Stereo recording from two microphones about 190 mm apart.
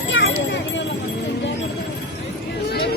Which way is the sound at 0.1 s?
85° left.